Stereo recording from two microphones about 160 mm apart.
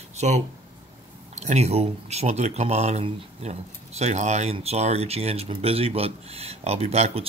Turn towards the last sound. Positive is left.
turn(degrees=-40)  # may be behind; listen again after turning